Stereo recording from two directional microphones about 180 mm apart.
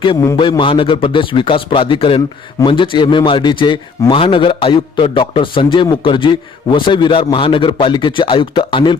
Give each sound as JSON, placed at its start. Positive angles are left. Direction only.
{"t": 0.3, "sound": "a man's voice", "side_deg": 25}